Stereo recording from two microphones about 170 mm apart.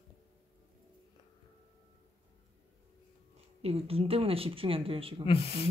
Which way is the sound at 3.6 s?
35° right (ahead or behind).